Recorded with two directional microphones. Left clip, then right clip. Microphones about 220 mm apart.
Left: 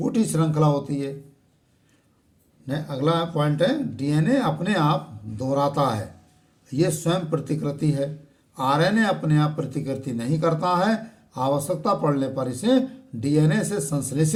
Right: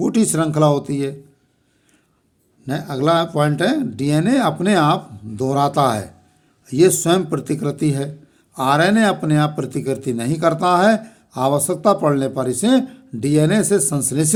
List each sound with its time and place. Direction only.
0.0 s speech: 55° right (ahead or behind)
2.6 s speech: 55° right (ahead or behind)